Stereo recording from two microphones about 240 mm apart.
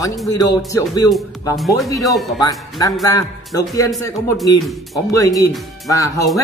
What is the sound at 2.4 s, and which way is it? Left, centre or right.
A man's voice, centre.